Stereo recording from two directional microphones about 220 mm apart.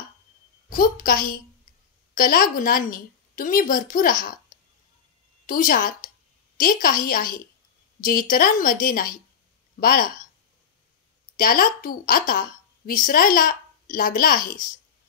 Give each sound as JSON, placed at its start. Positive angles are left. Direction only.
{"t": 0.7, "sound": "a woman's voice", "side_deg": 40}
{"t": 5.5, "sound": "a woman's voice", "side_deg": 40}
{"t": 11.3, "sound": "a woman's voice", "side_deg": 40}